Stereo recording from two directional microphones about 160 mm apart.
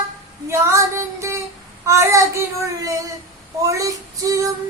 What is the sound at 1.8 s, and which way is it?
Female singing, 20° right (ahead or behind).